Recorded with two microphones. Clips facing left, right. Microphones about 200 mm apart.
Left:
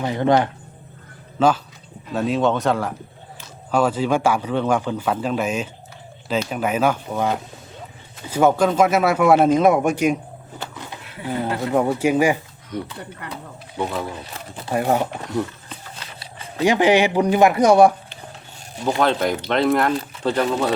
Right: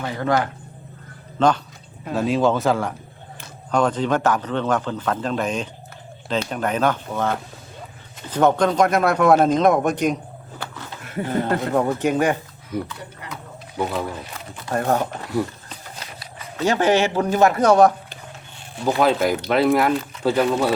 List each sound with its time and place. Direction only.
0.0 s speech: 20° left (ahead or behind)
1.4 s a man's voice: 5° left (ahead or behind)
10.6 s a sound: 15° left (ahead or behind)
11.0 s a sound: 45° right (ahead or behind)
11.7 s a man's voice: 10° left (ahead or behind)
12.7 s speech: 5° right (ahead or behind)
14.7 s a man's voice: 10° left (ahead or behind)
16.6 s a man's voice: 15° left (ahead or behind)
18.9 s speech: 5° right (ahead or behind)